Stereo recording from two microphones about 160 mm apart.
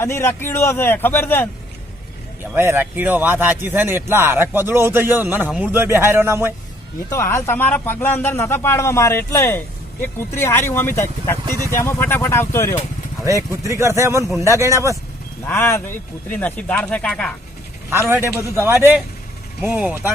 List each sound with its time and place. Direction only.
0.0 s speech: 15° left (ahead or behind)
2.6 s a man's voice: 15° right (ahead or behind)
7.1 s speech: 15° left (ahead or behind)
13.2 s a man's voice: 20° right (ahead or behind)
15.4 s speech: 15° left (ahead or behind)
17.9 s a man's voice: 15° right (ahead or behind)